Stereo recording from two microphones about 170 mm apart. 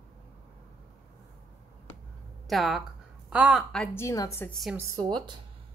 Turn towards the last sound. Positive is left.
turn(degrees=-25)  # may be behind; listen again after turning